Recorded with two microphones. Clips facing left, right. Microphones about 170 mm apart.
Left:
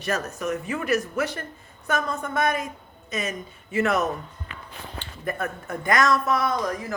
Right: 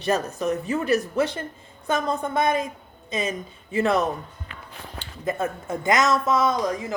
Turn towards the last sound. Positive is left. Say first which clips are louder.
# right 3 dB
turn(degrees=-20)  # may be behind; listen again after turning